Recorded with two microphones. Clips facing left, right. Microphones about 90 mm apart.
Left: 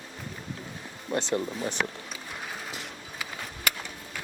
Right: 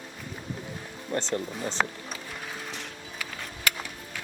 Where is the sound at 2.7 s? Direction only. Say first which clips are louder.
Even; 5° left (ahead or behind).